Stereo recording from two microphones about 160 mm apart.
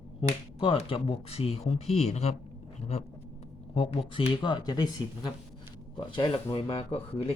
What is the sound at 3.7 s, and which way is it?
Speech, 35° left (ahead or behind).